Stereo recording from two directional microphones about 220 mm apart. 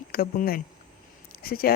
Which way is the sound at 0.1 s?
40° left (ahead or behind).